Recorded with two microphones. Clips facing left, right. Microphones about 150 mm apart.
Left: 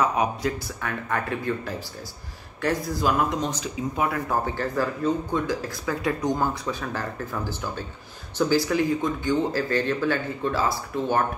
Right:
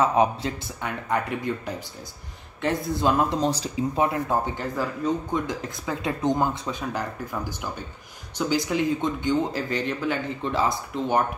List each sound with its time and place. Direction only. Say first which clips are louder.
0.0 s speech: right 2 dB; 30° right (ahead or behind)